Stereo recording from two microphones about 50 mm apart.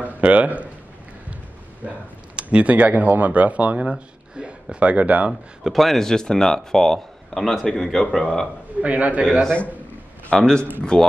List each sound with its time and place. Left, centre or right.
0.0 s a sound: right
1.9 s speech: right
5.6 s a man's voice: centre
5.9 s speech: centre
8.8 s speech: right
10.3 s speech: centre